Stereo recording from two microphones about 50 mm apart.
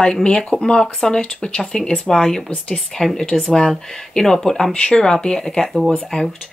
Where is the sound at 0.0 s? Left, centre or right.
Centre.